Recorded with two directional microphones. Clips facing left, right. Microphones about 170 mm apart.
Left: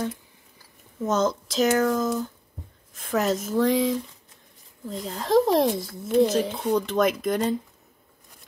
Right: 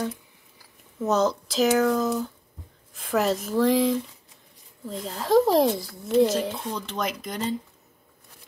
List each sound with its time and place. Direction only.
1.0 s speech: centre (ahead or behind)
6.7 s speech: 50° left (ahead or behind)